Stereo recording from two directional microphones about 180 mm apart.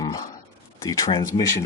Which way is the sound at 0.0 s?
20° left (ahead or behind).